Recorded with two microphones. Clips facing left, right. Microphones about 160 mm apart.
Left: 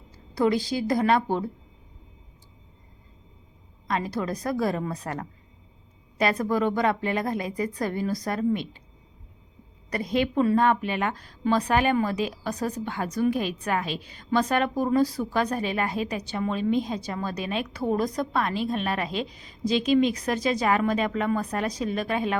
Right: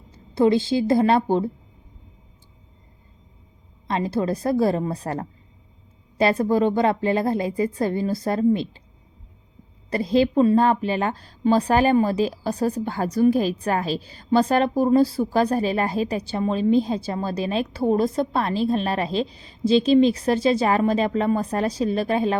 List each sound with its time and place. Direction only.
0.3 s a woman's voice: 25° right (ahead or behind)
3.8 s a woman's voice: 30° right (ahead or behind)
9.9 s a woman's voice: 30° right (ahead or behind)